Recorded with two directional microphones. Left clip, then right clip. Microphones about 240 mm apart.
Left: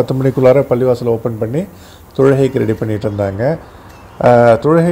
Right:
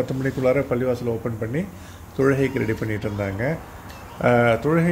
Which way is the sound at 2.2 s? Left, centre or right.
Centre.